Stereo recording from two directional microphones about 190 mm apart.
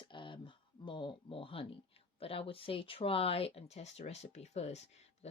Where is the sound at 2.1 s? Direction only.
30° left (ahead or behind).